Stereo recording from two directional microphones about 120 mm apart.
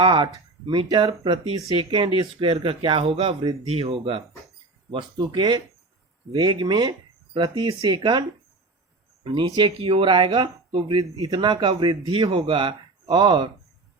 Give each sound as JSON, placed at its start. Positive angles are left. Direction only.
{"t": 0.0, "sound": "speech", "side_deg": -40}
{"t": 1.7, "sound": "speech", "side_deg": -45}
{"t": 4.9, "sound": "speech", "side_deg": -40}
{"t": 9.2, "sound": "speech", "side_deg": -45}